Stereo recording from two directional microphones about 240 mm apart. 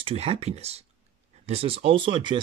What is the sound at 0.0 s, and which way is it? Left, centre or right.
Speech, right.